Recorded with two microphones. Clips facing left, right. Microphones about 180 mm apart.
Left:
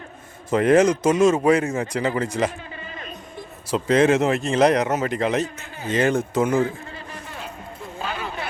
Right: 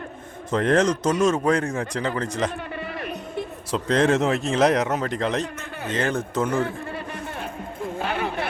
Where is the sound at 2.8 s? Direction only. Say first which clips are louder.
Right 6 dB; 65° right (ahead or behind).